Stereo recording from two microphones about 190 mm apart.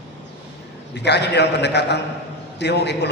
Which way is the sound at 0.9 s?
65° left (ahead or behind).